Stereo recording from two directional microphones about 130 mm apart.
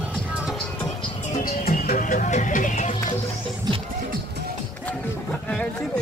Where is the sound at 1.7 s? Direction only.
90° left; by 2.9 s 75° left (ahead or behind).